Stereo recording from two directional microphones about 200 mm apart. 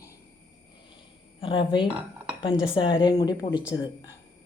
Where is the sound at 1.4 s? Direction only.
25° left (ahead or behind).